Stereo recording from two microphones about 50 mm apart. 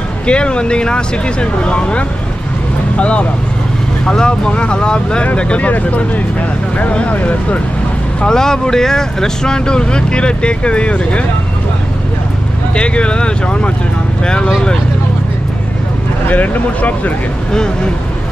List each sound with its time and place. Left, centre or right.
0.3 s speech: centre
8.2 s speech: centre
12.7 s speech: left
16.3 s speech: left